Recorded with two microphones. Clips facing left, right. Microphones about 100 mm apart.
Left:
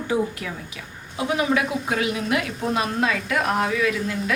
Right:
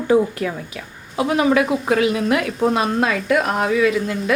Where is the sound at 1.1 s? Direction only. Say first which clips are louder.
Right 6 dB; 70° right (ahead or behind).